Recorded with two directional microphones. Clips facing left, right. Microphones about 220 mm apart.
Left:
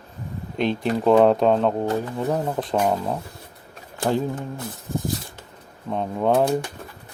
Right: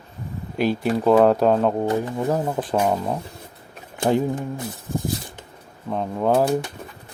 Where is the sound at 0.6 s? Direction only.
5° right (ahead or behind).